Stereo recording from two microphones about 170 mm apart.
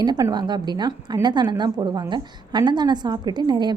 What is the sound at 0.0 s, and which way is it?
A woman's voice, 25° right (ahead or behind).